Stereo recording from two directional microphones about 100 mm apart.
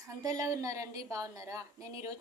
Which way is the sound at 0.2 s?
35° right (ahead or behind).